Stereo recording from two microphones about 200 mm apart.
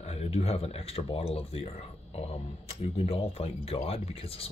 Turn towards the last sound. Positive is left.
turn(degrees=30)  # may be behind; listen again after turning